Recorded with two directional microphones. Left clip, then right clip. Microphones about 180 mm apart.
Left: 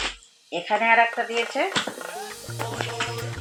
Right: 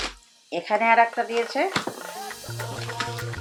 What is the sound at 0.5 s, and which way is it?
Speech, 20° right (ahead or behind).